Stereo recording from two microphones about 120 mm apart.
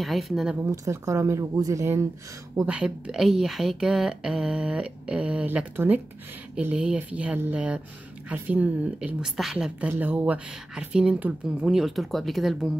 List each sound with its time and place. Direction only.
0.0 s speech: centre (ahead or behind)
0.7 s speech: 25° right (ahead or behind)
2.6 s a woman's voice: 10° right (ahead or behind)